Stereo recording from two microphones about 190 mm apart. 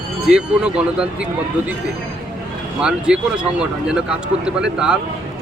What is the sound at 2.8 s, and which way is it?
Speech, 5° right (ahead or behind).